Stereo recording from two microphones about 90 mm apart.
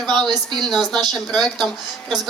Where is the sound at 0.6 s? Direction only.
5° left (ahead or behind).